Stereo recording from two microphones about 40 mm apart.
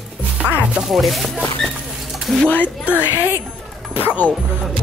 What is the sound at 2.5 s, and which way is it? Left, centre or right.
Speech, left.